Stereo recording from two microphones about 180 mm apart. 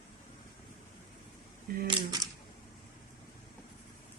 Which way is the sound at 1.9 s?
20° right (ahead or behind).